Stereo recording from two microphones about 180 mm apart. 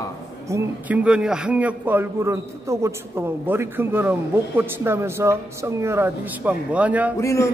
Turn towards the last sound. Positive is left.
turn(degrees=15)  # may be behind; listen again after turning